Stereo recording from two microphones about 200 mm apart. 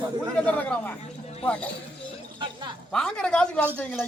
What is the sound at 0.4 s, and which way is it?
Speech, 5° left (ahead or behind).